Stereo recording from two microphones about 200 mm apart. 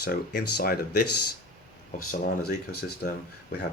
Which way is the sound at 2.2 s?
45° left (ahead or behind).